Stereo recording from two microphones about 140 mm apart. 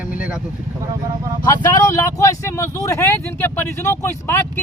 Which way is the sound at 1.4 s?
25° left (ahead or behind).